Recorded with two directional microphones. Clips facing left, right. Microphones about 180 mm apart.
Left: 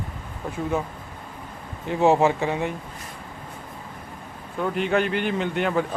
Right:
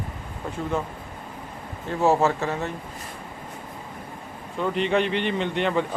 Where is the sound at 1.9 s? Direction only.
15° left (ahead or behind).